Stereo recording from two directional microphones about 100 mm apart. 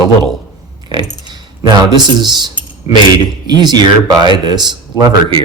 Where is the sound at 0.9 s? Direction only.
50° right (ahead or behind).